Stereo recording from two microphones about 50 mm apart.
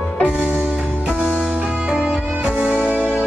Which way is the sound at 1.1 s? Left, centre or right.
Centre.